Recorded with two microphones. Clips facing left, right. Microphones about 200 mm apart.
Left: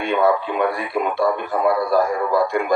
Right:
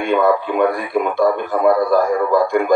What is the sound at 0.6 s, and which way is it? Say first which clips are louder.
A man's voice: right 4 dB; 45° right (ahead or behind).